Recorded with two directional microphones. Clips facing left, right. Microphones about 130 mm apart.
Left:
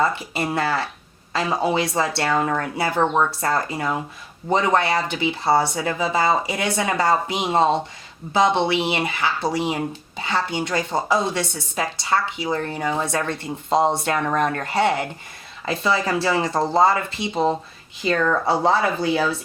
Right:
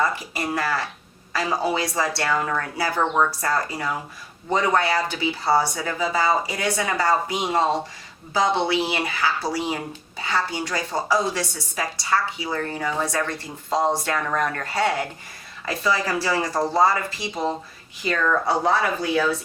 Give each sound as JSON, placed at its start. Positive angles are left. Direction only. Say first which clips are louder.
{"t": 0.0, "sound": "speech", "louder": "left 2 dB", "side_deg": 25}